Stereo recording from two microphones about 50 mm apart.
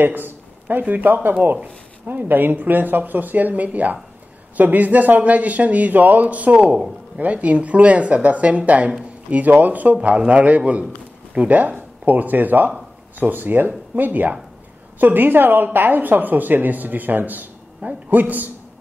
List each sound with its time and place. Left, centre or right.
0.0 s speech: right